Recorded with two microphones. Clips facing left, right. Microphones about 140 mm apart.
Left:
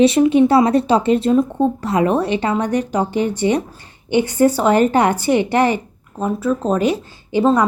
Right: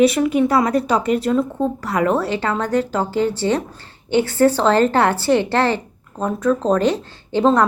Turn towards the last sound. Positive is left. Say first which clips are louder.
# left 1 dB
turn(degrees=10)  # may be behind; listen again after turning